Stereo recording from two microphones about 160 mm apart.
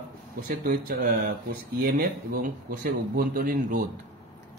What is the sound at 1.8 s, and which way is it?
A man's voice, 70° right (ahead or behind).